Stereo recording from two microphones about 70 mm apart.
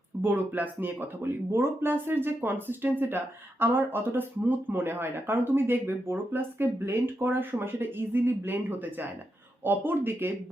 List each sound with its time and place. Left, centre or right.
0.2 s speech: right